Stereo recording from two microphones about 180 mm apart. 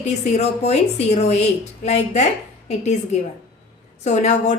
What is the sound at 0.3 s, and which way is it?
A woman's voice, 35° left (ahead or behind).